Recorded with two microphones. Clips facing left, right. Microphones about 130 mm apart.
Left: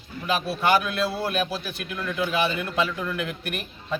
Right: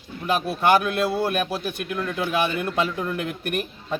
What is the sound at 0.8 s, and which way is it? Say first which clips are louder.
A man's voice: right 4 dB; 50° right (ahead or behind).